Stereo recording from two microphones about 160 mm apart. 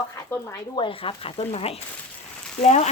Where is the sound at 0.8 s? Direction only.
35° left (ahead or behind).